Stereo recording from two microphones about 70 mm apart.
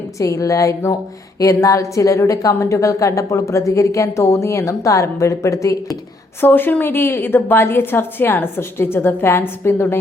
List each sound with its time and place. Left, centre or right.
0.4 s a woman's voice: left
6.4 s a woman's voice: left